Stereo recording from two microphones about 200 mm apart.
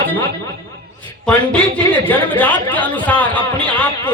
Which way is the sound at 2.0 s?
10° left (ahead or behind).